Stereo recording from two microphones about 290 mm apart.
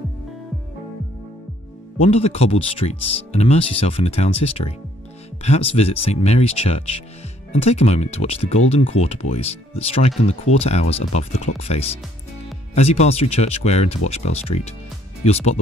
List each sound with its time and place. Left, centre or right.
2.0 s speech: left